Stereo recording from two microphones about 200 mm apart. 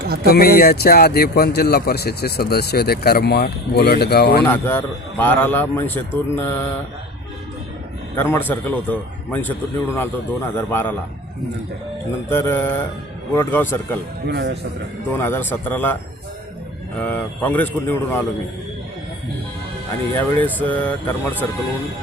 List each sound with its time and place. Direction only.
0.0 s a sound: 50° right (ahead or behind)
0.3 s speech: 50° left (ahead or behind)
4.4 s a man's voice: 10° left (ahead or behind)
8.1 s a man's voice: 10° left (ahead or behind)
12.3 s a man's voice: 10° left (ahead or behind)
14.3 s speech: 55° right (ahead or behind)
15.2 s a man's voice: 10° left (ahead or behind)
17.0 s a man's voice: 10° left (ahead or behind)
20.1 s a man's voice: 10° left (ahead or behind)